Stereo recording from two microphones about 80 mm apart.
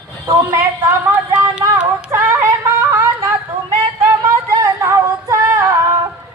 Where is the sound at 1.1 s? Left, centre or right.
Centre.